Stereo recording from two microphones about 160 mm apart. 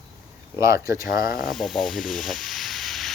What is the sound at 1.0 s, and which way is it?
Speech, 65° left (ahead or behind).